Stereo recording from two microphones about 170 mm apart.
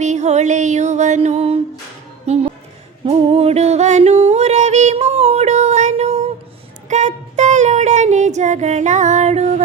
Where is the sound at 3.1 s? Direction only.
35° right (ahead or behind).